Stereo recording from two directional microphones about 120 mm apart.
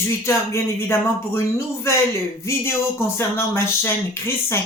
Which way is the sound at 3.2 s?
20° left (ahead or behind).